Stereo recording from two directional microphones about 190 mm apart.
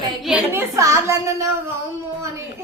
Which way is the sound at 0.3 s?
10° right (ahead or behind).